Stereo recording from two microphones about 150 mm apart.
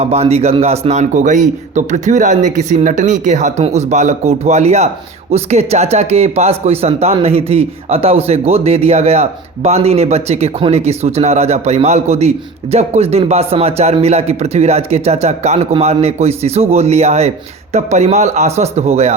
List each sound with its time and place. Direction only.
0.0 s speech: 45° right (ahead or behind)